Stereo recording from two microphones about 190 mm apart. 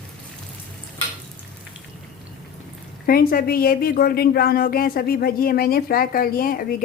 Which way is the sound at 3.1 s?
50° left (ahead or behind).